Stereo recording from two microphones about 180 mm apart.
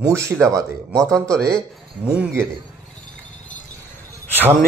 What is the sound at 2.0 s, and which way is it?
Speech, 5° right (ahead or behind).